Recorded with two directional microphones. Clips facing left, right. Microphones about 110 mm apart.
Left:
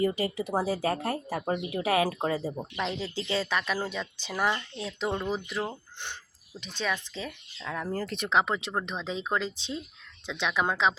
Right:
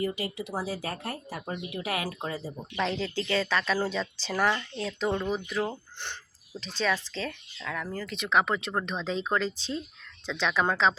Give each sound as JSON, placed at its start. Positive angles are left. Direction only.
{"t": 0.0, "sound": "speech", "side_deg": 30}
{"t": 0.3, "sound": "speech", "side_deg": 45}
{"t": 0.6, "sound": "speech", "side_deg": 20}
{"t": 1.3, "sound": "speech", "side_deg": 40}
{"t": 2.7, "sound": "speech", "side_deg": 5}
{"t": 6.7, "sound": "speech", "side_deg": 15}
{"t": 7.7, "sound": "speech", "side_deg": 30}
{"t": 8.0, "sound": "speech", "side_deg": 50}
{"t": 8.3, "sound": "speech", "side_deg": 25}